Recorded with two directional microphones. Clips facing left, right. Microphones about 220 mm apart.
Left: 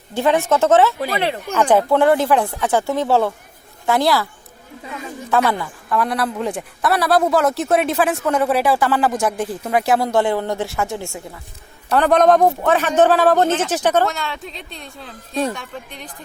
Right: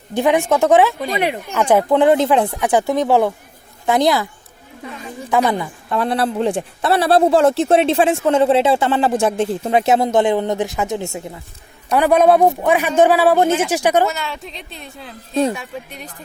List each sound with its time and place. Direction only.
0.1 s a man's voice: 15° right (ahead or behind)
5.3 s a man's voice: 15° right (ahead or behind)
14.1 s speech: centre (ahead or behind)